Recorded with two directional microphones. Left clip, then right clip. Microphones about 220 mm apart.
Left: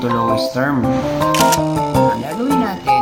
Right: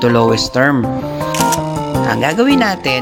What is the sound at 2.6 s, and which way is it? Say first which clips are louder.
Speech: right 1 dB; 40° right (ahead or behind).